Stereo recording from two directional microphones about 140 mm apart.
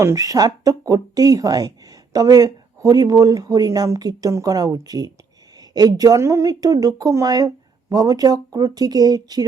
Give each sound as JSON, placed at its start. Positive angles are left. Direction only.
{"t": 0.0, "sound": "speech", "side_deg": -25}